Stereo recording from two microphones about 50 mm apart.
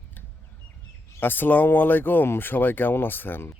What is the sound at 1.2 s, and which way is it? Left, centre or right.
Speech, left.